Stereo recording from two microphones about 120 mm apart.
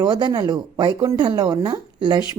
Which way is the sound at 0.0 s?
40° right (ahead or behind).